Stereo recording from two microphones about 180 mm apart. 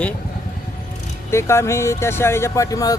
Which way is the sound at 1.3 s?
15° left (ahead or behind).